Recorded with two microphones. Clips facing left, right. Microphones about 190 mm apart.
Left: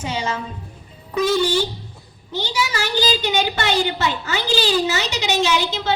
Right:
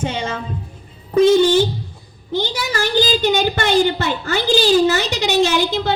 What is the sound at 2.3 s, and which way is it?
A woman's voice, 55° right (ahead or behind).